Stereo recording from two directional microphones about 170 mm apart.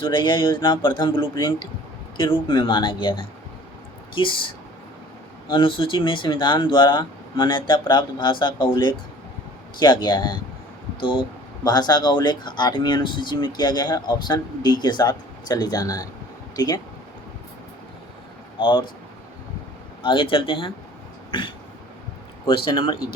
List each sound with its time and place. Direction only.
0.0 s speech: 30° left (ahead or behind)
5.5 s speech: 30° left (ahead or behind)
18.6 s speech: 30° left (ahead or behind)
20.0 s speech: 30° left (ahead or behind)
21.2 s throat clearing: 30° left (ahead or behind)
22.4 s speech: 25° left (ahead or behind)